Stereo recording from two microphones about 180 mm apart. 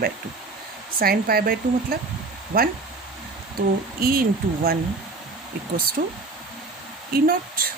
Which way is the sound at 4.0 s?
55° right (ahead or behind).